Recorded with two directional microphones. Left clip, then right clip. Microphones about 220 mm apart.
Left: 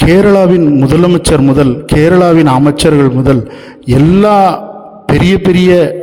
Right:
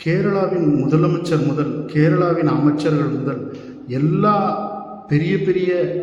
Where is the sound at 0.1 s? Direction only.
50° left (ahead or behind).